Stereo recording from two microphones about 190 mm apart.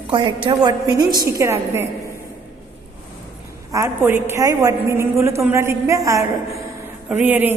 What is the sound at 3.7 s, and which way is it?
A man's voice, 15° right (ahead or behind).